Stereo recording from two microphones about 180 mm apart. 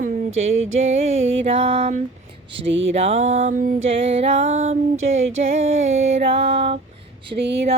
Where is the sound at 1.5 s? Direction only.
35° right (ahead or behind); by 3.8 s 50° right (ahead or behind).